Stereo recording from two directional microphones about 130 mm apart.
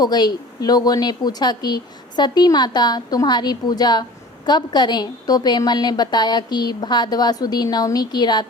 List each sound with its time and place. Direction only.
0.0 s a woman's voice: 30° left (ahead or behind)